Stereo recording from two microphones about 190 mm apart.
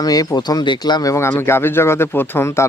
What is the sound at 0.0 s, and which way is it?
Speech, 20° left (ahead or behind).